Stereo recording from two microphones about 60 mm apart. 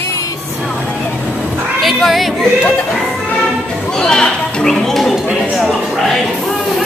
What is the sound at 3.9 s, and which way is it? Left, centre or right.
Speech, centre.